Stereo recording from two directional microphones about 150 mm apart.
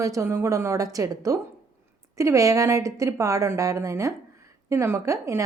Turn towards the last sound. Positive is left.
turn(degrees=-20)  # may be behind; listen again after turning